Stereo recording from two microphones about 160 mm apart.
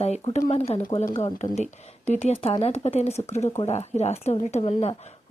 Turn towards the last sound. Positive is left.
turn(degrees=40)  # may be behind; listen again after turning